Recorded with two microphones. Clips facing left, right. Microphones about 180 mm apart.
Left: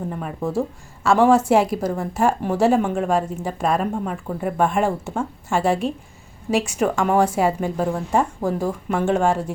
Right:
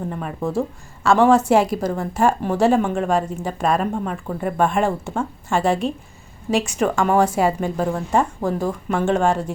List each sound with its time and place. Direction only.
0.1 s a woman's voice: 5° left (ahead or behind)